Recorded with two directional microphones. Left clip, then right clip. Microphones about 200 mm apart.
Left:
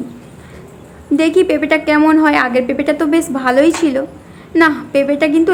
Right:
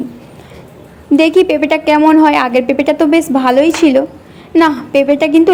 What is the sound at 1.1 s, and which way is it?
A woman's voice, 20° right (ahead or behind).